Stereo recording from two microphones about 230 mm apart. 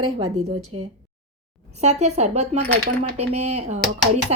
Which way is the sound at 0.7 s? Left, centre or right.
Right.